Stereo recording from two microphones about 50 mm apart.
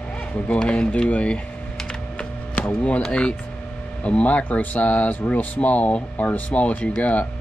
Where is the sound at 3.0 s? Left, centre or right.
Left.